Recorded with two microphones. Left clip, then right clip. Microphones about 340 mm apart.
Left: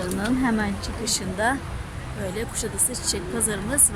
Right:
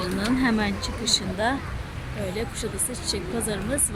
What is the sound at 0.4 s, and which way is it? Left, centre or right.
Speech, centre.